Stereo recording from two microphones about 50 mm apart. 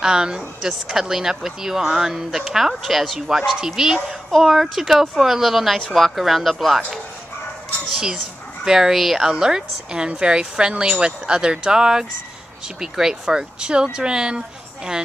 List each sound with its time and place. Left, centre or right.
0.0 s a woman's voice: centre
8.6 s speech: centre